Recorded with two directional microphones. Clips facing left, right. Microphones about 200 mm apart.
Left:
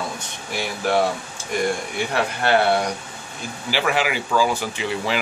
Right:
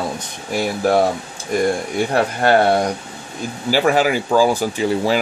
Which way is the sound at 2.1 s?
40° right (ahead or behind).